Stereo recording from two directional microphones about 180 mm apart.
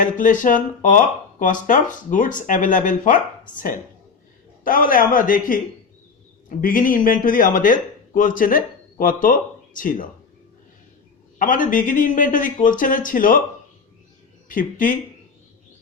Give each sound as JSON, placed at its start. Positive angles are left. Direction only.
{"t": 0.0, "sound": "speech", "side_deg": 45}
{"t": 6.6, "sound": "speech", "side_deg": 50}
{"t": 11.3, "sound": "speech", "side_deg": 45}
{"t": 14.4, "sound": "speech", "side_deg": 50}